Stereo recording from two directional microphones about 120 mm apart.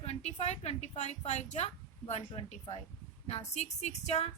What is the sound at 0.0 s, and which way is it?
A woman's voice, 60° left (ahead or behind).